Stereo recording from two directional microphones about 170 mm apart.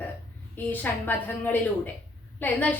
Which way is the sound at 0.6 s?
10° left (ahead or behind).